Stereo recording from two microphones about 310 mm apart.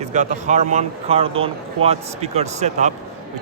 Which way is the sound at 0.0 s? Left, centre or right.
Right.